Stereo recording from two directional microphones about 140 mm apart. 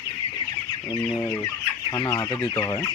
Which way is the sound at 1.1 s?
15° left (ahead or behind).